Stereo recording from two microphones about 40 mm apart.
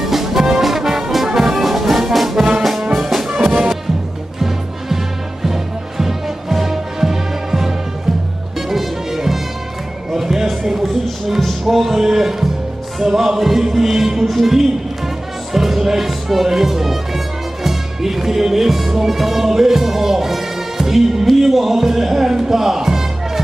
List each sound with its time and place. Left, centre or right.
0.0 s music: centre
3.3 s music: centre